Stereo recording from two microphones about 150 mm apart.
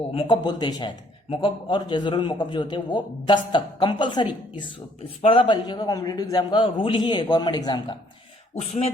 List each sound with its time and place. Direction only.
0.1 s a man's voice: 35° left (ahead or behind)
8.5 s speech: 50° left (ahead or behind)